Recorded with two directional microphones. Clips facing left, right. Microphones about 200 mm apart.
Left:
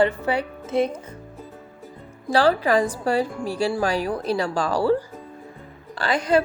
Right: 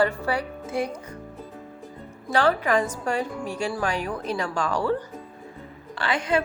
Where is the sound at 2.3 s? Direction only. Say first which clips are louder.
Left 3 dB; 35° left (ahead or behind).